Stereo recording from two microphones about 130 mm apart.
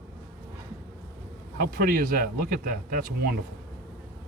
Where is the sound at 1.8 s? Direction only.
90° right.